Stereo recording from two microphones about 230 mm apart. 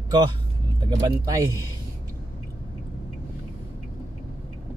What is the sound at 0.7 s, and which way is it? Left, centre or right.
Speech, centre.